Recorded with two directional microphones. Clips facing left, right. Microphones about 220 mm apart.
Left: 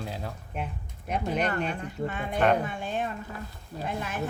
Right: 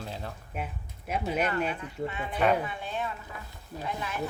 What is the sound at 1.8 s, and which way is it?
Speech, 45° left (ahead or behind).